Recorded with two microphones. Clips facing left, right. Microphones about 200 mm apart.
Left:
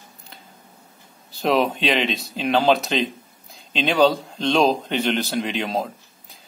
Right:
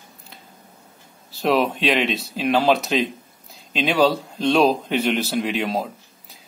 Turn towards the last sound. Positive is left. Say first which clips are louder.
# right 1 dB
turn(degrees=-5)  # may be behind; listen again after turning